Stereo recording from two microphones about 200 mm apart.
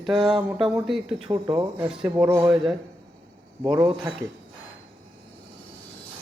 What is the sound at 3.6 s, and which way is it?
Speech, 20° right (ahead or behind).